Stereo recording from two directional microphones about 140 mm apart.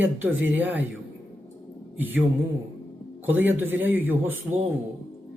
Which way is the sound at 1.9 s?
10° right (ahead or behind).